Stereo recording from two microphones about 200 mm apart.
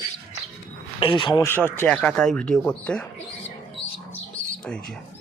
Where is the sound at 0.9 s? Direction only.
25° left (ahead or behind).